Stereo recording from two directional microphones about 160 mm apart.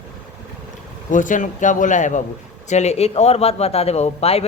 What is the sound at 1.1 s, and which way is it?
Speech, 55° left (ahead or behind).